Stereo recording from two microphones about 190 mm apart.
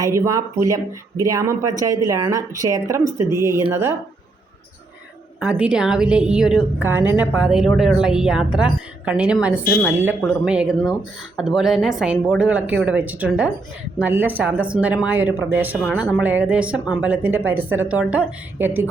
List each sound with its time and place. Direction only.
0.0 s speech: 15° right (ahead or behind)
5.4 s a woman's voice: 5° right (ahead or behind)